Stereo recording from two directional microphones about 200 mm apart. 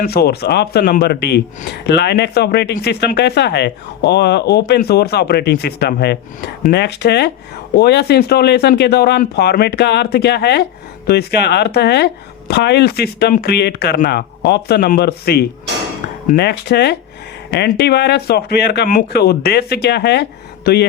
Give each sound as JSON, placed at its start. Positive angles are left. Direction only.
{"t": 0.0, "sound": "speech", "side_deg": 50}